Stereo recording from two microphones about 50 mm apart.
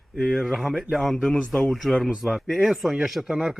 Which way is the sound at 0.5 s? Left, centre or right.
Centre.